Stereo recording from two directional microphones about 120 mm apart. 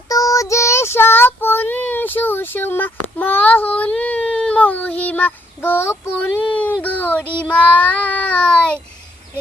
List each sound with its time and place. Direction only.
0.1 s child singing: 30° left (ahead or behind)
6.5 s a sound: 15° left (ahead or behind)
6.8 s child singing: 15° left (ahead or behind)